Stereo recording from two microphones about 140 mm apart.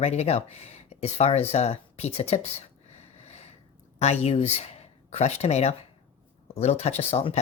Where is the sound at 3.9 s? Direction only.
50° left (ahead or behind).